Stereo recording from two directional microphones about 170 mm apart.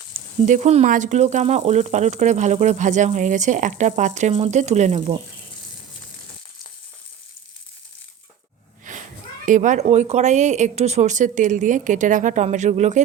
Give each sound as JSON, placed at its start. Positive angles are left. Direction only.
{"t": 0.4, "sound": "speech", "side_deg": -45}
{"t": 9.5, "sound": "speech", "side_deg": -45}